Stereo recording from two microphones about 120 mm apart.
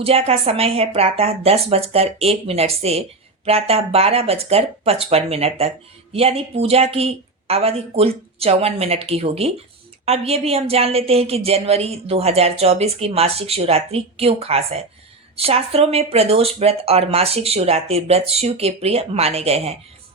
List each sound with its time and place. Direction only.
0.0 s speech: 55° right (ahead or behind)